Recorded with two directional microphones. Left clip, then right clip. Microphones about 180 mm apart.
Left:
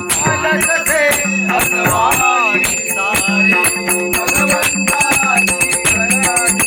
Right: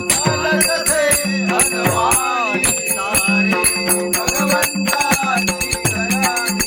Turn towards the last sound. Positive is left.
turn(degrees=55)  # may be behind; listen again after turning